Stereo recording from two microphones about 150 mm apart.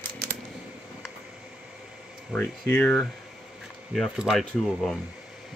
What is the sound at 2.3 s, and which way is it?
Speech, 10° left (ahead or behind).